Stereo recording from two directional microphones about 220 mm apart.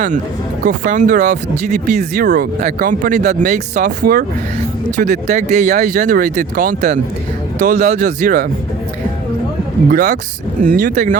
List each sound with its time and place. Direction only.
0.6 s speech: 35° right (ahead or behind)
9.9 s speech: 35° right (ahead or behind)